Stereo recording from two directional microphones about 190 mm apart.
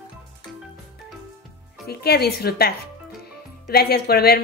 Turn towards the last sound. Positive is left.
turn(degrees=55)  # may be behind; listen again after turning